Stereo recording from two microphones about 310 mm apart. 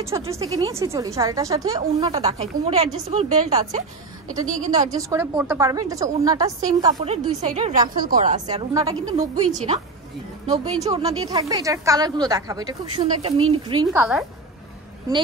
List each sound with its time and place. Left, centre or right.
0.0 s a woman's voice: centre; by 8.4 s right
8.5 s speech: centre
9.5 s a woman's voice: right
13.9 s a woman's voice: centre